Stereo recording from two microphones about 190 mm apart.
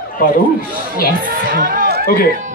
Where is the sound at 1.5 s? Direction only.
55° right (ahead or behind).